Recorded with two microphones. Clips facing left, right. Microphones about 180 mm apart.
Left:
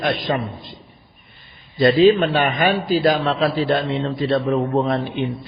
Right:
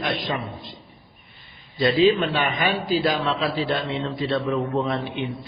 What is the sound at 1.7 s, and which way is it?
A man's voice, 50° left (ahead or behind).